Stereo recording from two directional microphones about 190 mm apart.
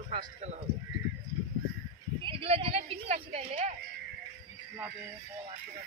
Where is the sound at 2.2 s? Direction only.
30° right (ahead or behind).